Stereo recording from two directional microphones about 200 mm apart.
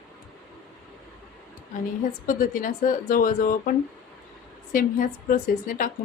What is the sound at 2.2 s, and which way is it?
Speech, 45° left (ahead or behind).